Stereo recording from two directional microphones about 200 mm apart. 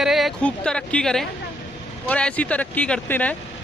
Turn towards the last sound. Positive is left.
turn(degrees=5)  # may be behind; listen again after turning